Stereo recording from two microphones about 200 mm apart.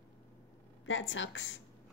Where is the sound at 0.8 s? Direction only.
70° left (ahead or behind).